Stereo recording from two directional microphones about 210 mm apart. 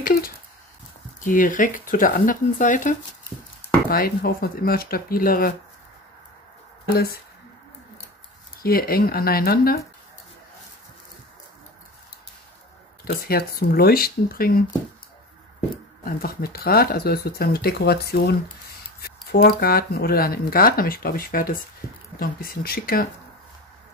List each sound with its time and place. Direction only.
0.0 s a sound: 45° left (ahead or behind)
1.2 s speech: 40° left (ahead or behind)
8.6 s speech: 45° left (ahead or behind)
13.0 s speech: 45° left (ahead or behind)
16.0 s speech: 45° left (ahead or behind)